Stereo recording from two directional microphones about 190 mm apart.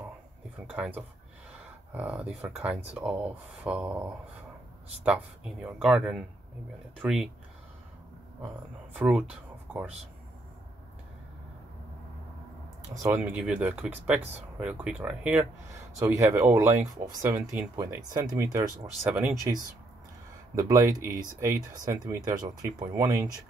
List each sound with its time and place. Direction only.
0.7 s speech: 10° right (ahead or behind)
8.9 s speech: 5° right (ahead or behind)
13.0 s speech: 10° right (ahead or behind)
20.5 s speech: 20° right (ahead or behind)